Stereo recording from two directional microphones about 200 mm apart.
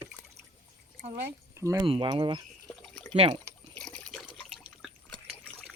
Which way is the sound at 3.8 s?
5° left (ahead or behind).